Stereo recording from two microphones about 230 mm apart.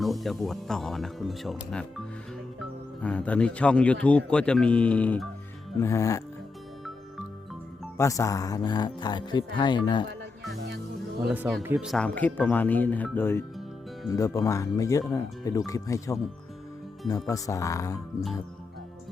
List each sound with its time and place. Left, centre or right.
0.0 s speech: centre
7.9 s speech: centre
10.5 s music: right
11.3 s speech: centre